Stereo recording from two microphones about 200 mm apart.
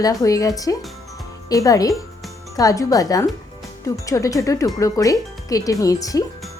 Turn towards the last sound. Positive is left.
turn(degrees=15)  # may be behind; listen again after turning